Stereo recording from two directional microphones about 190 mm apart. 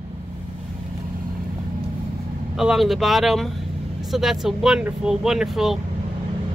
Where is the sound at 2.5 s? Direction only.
Centre (ahead or behind).